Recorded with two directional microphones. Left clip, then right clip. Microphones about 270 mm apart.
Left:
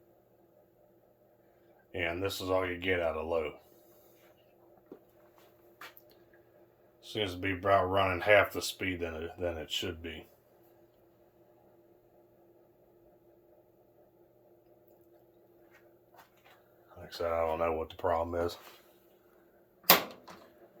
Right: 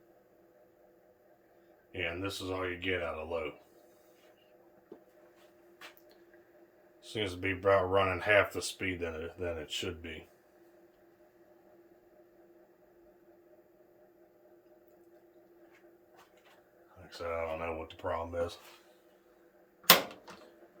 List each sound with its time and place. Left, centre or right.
1.9 s speech: centre
7.0 s speech: centre
17.1 s speech: left